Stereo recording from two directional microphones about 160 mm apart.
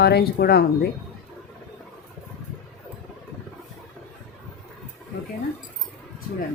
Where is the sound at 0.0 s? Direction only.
85° left.